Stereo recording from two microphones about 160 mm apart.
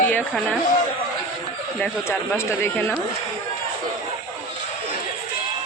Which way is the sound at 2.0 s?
15° left (ahead or behind).